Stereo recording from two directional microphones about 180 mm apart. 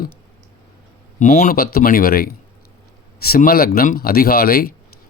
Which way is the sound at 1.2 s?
45° left (ahead or behind).